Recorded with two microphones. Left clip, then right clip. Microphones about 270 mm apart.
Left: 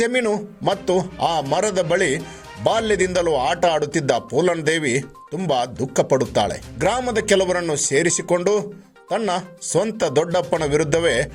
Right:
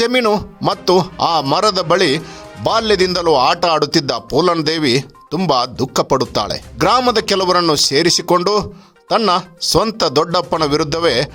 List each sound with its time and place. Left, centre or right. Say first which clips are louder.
0.0 s a man's voice: right 5 dB; right